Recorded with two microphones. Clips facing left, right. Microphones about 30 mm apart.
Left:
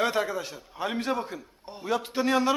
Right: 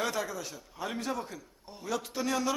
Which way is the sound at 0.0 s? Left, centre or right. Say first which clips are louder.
Left 6 dB; left.